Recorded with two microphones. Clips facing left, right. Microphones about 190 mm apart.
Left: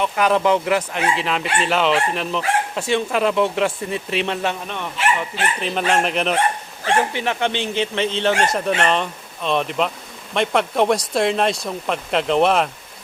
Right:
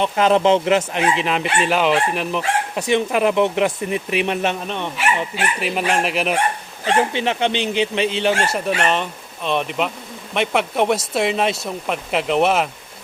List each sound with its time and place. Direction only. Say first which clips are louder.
0.0 s speech: right 2 dB; 25° right (ahead or behind)
5.5 s speech: left 1 dB; 10° right (ahead or behind)
6.8 s speech: right 1 dB; 20° right (ahead or behind); by 12.7 s 5° right (ahead or behind)